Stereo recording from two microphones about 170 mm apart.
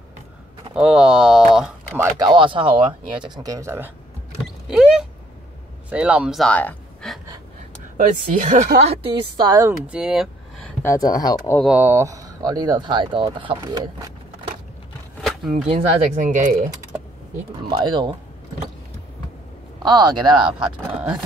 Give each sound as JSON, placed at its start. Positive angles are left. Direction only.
{"t": 0.7, "sound": "speech", "side_deg": -5}
{"t": 2.0, "sound": "speech", "side_deg": -25}
{"t": 4.6, "sound": "speech", "side_deg": -5}
{"t": 8.0, "sound": "speech", "side_deg": -50}
{"t": 8.7, "sound": "a woman's voice", "side_deg": -35}
{"t": 9.6, "sound": "speech", "side_deg": -10}
{"t": 10.8, "sound": "speech", "side_deg": 20}
{"t": 11.6, "sound": "speech", "side_deg": -10}
{"t": 15.5, "sound": "speech", "side_deg": -40}
{"t": 17.6, "sound": "speech", "side_deg": -25}
{"t": 19.8, "sound": "speech", "side_deg": -25}